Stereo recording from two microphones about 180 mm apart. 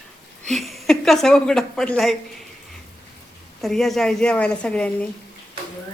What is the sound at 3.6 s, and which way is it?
A woman's voice, centre (ahead or behind).